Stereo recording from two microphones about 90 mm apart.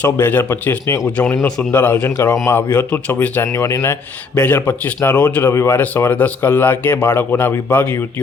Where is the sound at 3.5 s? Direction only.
30° left (ahead or behind).